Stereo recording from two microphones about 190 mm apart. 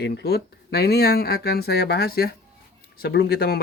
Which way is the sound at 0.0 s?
60° left (ahead or behind).